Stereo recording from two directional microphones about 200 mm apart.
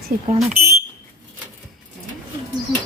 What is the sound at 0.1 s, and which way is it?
Speech, 45° right (ahead or behind).